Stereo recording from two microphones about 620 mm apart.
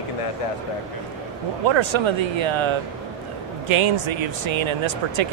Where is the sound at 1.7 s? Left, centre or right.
Right.